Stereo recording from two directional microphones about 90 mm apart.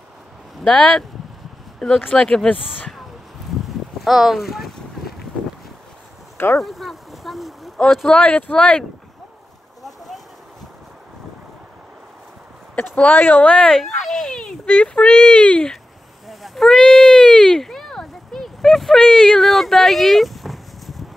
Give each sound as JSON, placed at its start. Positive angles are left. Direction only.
{"t": 0.7, "sound": "speech", "side_deg": 10}
{"t": 2.0, "sound": "speech", "side_deg": 5}
{"t": 4.0, "sound": "speech", "side_deg": -5}
{"t": 6.3, "sound": "a sound", "side_deg": 25}
{"t": 6.6, "sound": "speech", "side_deg": 0}
{"t": 8.1, "sound": "speech", "side_deg": 15}
{"t": 9.8, "sound": "a sound", "side_deg": 0}
{"t": 12.7, "sound": "speech", "side_deg": 20}
{"t": 16.3, "sound": "a sound", "side_deg": 0}
{"t": 19.2, "sound": "speech", "side_deg": 5}